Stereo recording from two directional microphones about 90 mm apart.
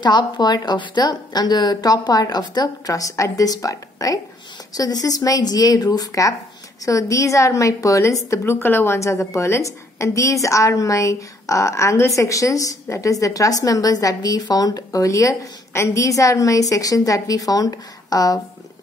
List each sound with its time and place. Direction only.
0.0 s a woman's voice: 55° left (ahead or behind)